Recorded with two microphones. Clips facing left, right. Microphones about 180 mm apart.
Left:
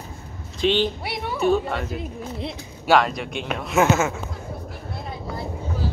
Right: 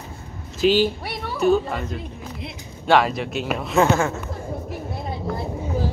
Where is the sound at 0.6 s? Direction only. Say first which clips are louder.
Right 3 dB; 5° right (ahead or behind).